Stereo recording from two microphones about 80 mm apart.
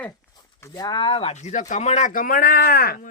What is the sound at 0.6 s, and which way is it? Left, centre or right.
Speech, left.